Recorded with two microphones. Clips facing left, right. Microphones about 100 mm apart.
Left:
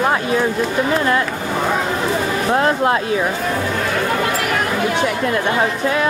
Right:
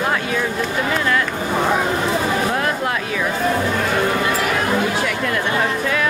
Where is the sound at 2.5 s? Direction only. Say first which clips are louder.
Left 5 dB; 25° left (ahead or behind).